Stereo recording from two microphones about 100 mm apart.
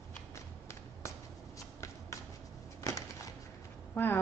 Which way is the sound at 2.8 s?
35° left (ahead or behind).